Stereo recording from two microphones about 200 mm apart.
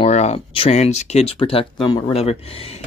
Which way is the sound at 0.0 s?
30° left (ahead or behind).